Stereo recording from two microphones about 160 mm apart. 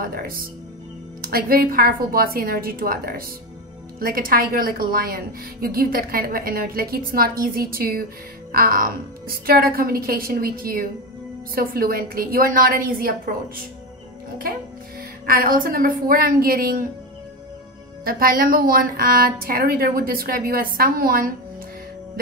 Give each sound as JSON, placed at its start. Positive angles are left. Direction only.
{"t": 0.0, "sound": "a woman's voice", "side_deg": -65}
{"t": 15.2, "sound": "a woman's voice", "side_deg": -60}
{"t": 18.0, "sound": "a woman's voice", "side_deg": -65}